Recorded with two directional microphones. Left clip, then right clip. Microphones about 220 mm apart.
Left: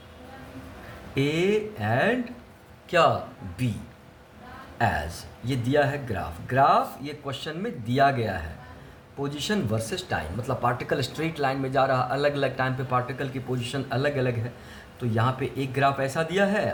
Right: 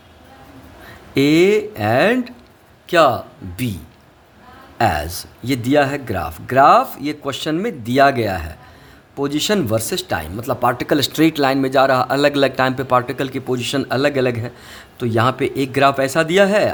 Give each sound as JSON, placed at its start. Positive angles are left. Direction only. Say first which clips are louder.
{"t": 1.1, "sound": "speech", "louder": "right 11 dB", "side_deg": -50}
{"t": 4.8, "sound": "speech", "louder": "right 8 dB", "side_deg": -50}